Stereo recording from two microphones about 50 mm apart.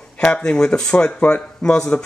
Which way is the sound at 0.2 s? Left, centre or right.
Left.